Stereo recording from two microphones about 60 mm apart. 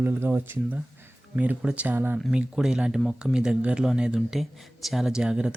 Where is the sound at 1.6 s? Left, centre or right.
Right.